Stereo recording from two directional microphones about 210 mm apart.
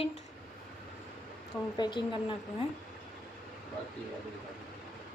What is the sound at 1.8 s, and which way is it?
Speech, 20° left (ahead or behind).